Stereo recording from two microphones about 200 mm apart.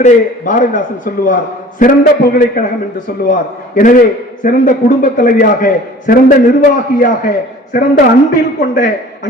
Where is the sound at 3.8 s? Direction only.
40° left (ahead or behind).